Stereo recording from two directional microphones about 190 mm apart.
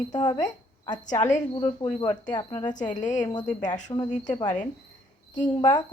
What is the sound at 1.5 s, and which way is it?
A woman's voice, 25° left (ahead or behind).